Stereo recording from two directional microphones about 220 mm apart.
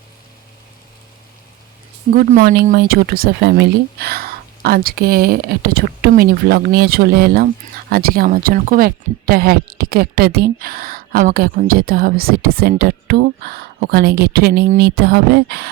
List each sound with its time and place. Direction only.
2.1 s speech: 40° right (ahead or behind)